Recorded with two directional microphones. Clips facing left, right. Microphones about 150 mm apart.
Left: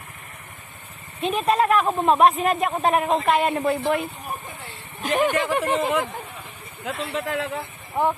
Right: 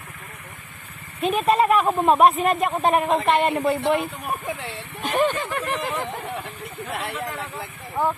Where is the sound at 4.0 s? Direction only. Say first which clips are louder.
Right 3 dB; 75° right (ahead or behind).